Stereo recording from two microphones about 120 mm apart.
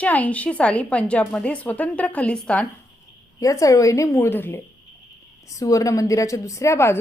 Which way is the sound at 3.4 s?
25° left (ahead or behind).